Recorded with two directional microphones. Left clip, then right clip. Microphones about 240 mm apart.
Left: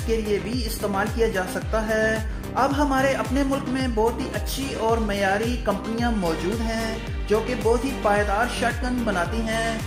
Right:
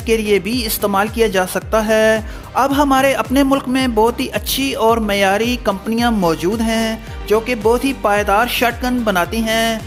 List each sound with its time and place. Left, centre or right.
0.1 s speech: right